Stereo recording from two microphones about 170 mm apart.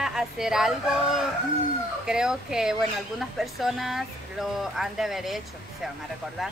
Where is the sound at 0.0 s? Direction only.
5° right (ahead or behind).